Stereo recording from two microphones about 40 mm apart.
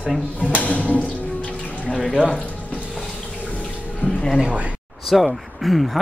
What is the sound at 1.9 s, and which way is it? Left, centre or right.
Speech, centre.